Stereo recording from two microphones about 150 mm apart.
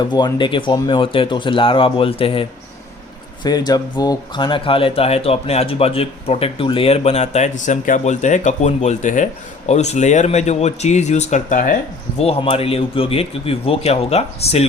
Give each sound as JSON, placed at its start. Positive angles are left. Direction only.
{"t": 0.0, "sound": "speech", "side_deg": 30}
{"t": 3.4, "sound": "speech", "side_deg": 25}
{"t": 12.2, "sound": "speech", "side_deg": 40}